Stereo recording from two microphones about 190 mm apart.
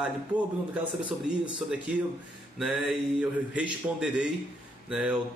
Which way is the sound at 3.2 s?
5° right (ahead or behind).